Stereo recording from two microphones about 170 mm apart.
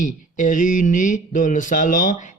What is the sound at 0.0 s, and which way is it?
Speech, 50° left (ahead or behind).